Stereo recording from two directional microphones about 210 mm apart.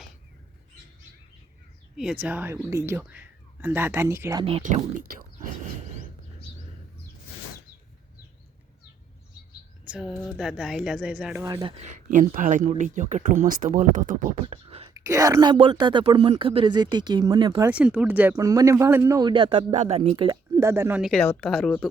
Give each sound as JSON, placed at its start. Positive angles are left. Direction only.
{"t": 2.2, "sound": "speech", "side_deg": -10}
{"t": 4.4, "sound": "speech", "side_deg": -30}
{"t": 9.8, "sound": "a woman's voice", "side_deg": -5}
{"t": 11.4, "sound": "speech", "side_deg": -20}
{"t": 11.8, "sound": "speech", "side_deg": -35}
{"t": 17.7, "sound": "speech", "side_deg": -5}
{"t": 20.0, "sound": "speech", "side_deg": -20}